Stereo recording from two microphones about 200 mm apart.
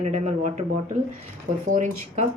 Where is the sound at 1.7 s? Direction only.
40° right (ahead or behind).